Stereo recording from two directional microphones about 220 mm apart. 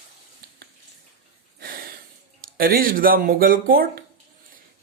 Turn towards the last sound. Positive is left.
turn(degrees=-40)  # may be behind; listen again after turning